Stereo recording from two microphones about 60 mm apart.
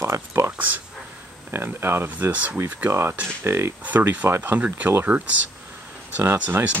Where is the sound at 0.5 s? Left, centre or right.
Right.